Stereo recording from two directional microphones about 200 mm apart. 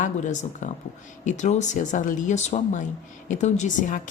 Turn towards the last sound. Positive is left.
turn(degrees=40)  # may be behind; listen again after turning